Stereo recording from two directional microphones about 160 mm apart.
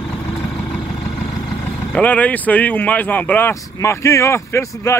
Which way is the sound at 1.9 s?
10° left (ahead or behind).